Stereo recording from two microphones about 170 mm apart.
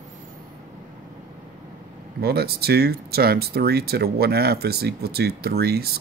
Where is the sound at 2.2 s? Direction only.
65° right (ahead or behind).